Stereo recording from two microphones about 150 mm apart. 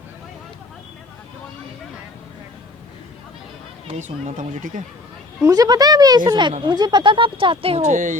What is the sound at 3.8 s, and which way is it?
Speech, 45° right (ahead or behind).